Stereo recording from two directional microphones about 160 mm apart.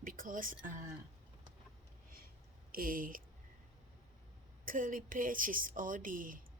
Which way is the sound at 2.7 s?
60° right (ahead or behind).